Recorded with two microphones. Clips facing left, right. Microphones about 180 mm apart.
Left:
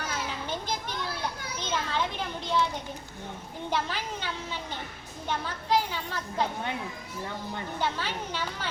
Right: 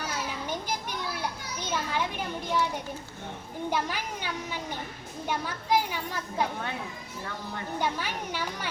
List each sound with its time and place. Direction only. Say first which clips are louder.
0.4 s children playing: even; 10° right (ahead or behind)
1.5 s a child's voice: even; 10° right (ahead or behind)
3.7 s speech: even; 10° right (ahead or behind)
7.8 s speech: right 1 dB; 15° right (ahead or behind)